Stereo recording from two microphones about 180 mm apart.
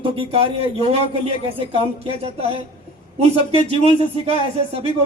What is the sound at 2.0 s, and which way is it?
A man's voice, 35° right (ahead or behind).